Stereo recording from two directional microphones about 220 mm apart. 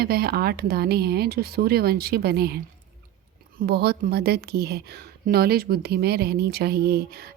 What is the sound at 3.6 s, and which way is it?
A woman's voice, 45° right (ahead or behind).